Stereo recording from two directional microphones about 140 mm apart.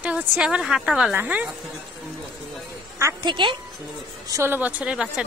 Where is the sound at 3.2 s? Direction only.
35° right (ahead or behind).